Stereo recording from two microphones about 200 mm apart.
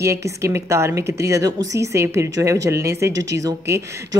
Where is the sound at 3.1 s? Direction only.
65° right (ahead or behind).